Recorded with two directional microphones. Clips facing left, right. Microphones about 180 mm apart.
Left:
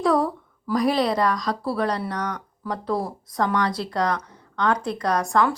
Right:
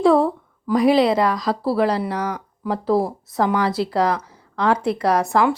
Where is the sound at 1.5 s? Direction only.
25° right (ahead or behind).